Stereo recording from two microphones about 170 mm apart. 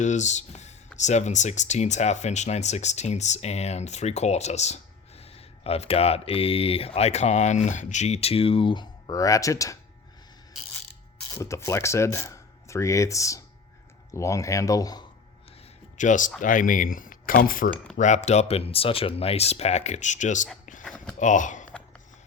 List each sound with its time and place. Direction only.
0.0 s speech: 45° left (ahead or behind); by 9.7 s 20° left (ahead or behind)
11.3 s speech: 15° left (ahead or behind)
16.0 s speech: 50° left (ahead or behind)
17.9 s speech: 45° left (ahead or behind)
20.8 s a sound: 5° left (ahead or behind)
21.2 s speech: 50° left (ahead or behind)